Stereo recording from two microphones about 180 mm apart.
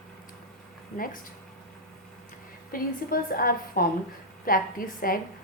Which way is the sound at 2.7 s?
55° left (ahead or behind).